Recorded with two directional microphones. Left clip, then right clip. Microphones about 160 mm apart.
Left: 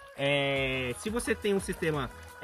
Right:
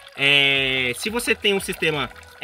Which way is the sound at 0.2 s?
5° right (ahead or behind).